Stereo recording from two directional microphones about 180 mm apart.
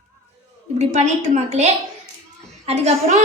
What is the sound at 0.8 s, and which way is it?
A woman's voice, 40° right (ahead or behind).